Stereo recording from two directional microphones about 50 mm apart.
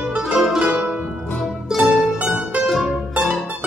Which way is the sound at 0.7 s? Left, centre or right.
Right.